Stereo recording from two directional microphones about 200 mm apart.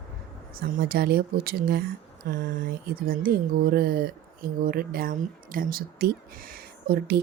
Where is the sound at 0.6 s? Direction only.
50° right (ahead or behind).